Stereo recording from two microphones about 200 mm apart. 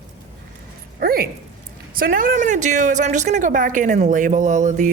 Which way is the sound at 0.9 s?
50° right (ahead or behind).